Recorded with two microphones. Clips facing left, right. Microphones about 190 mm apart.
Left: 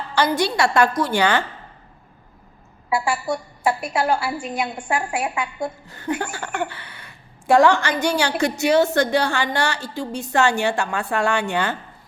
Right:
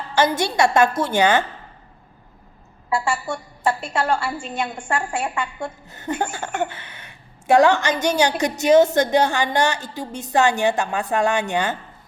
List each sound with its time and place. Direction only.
0.2 s a woman's voice: 20° right (ahead or behind)
2.9 s a woman's voice: 10° left (ahead or behind)
6.1 s a woman's voice: 25° right (ahead or behind)